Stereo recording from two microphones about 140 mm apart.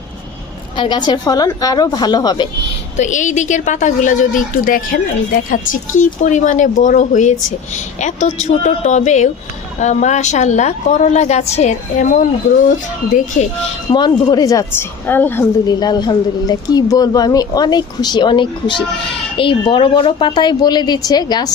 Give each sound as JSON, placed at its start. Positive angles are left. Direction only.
{"t": 0.8, "sound": "speech", "side_deg": 30}
{"t": 3.0, "sound": "a woman's voice", "side_deg": 60}
{"t": 13.1, "sound": "a woman's voice", "side_deg": 65}
{"t": 13.9, "sound": "speech", "side_deg": 30}
{"t": 15.6, "sound": "a woman's voice", "side_deg": 30}